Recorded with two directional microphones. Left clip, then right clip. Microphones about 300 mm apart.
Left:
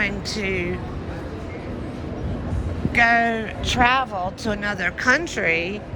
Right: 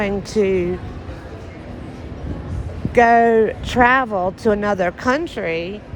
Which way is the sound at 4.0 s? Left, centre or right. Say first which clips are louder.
Right 5 dB; right.